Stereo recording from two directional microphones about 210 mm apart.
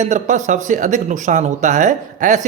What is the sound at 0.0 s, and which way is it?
Speech, 35° right (ahead or behind).